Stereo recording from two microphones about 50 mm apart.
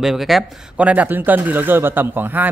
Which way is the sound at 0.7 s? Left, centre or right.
Right.